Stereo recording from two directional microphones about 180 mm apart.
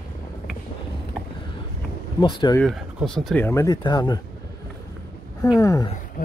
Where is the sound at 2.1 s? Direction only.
25° left (ahead or behind).